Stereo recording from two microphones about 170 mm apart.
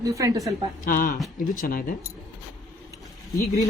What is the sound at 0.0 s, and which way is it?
Speech, 20° right (ahead or behind).